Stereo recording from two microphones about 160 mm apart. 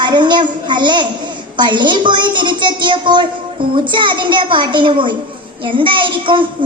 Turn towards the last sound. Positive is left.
turn(degrees=-30)  # may be behind; listen again after turning